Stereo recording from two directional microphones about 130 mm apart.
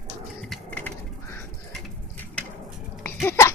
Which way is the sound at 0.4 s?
10° left (ahead or behind).